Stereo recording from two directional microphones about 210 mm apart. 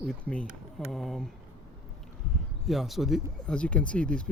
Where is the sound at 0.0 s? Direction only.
5° left (ahead or behind).